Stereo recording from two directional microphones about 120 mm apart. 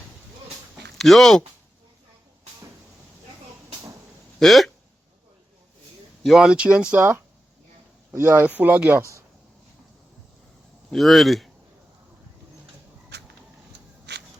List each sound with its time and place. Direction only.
0.9 s a man's voice: centre (ahead or behind)
4.4 s speech: centre (ahead or behind)
6.2 s speech: 5° right (ahead or behind); by 9.2 s 25° right (ahead or behind)
10.9 s a man's voice: centre (ahead or behind)